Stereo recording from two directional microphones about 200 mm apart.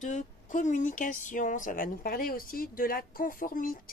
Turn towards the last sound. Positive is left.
turn(degrees=45)  # may be behind; listen again after turning